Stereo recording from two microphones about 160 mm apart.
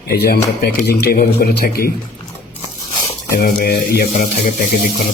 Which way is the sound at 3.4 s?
65° left (ahead or behind).